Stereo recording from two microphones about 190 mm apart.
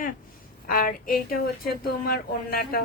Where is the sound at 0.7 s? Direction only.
50° left (ahead or behind).